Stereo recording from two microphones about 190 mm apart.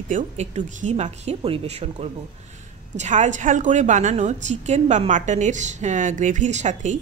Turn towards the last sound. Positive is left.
turn(degrees=-40)  # may be behind; listen again after turning